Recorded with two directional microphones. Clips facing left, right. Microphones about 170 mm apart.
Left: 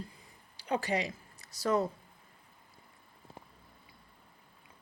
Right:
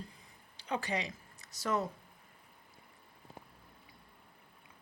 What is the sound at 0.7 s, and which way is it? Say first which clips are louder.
Speech: left 4 dB; 35° left (ahead or behind).